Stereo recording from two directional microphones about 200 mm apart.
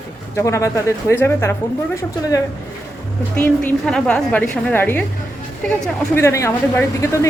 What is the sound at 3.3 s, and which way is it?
A woman's voice, 5° left (ahead or behind).